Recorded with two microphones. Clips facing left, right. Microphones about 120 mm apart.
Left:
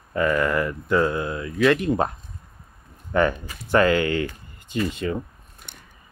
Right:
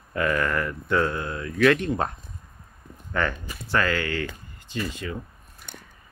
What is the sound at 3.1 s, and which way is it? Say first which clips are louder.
Speech: left 6 dB; 20° left (ahead or behind).